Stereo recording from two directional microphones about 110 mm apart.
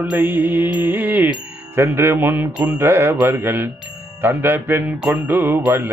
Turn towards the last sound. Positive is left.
turn(degrees=-15)  # may be behind; listen again after turning